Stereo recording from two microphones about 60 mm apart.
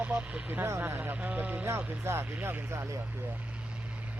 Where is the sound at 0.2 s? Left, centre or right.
Right.